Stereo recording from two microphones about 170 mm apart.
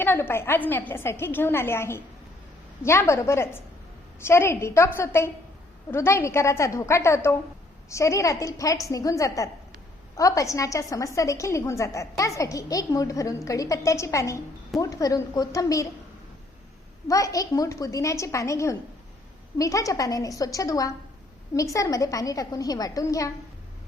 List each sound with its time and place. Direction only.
0.0 s a woman's voice: 15° left (ahead or behind)
17.1 s a woman's voice: 20° left (ahead or behind)